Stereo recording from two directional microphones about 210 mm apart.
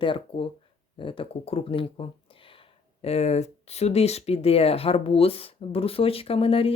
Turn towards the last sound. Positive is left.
turn(degrees=25)  # may be behind; listen again after turning